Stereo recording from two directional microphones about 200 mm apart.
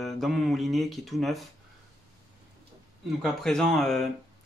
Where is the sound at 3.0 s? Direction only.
Centre (ahead or behind).